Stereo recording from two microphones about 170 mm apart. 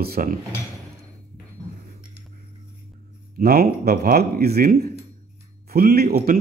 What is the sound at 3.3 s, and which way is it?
A man's voice, 60° right (ahead or behind).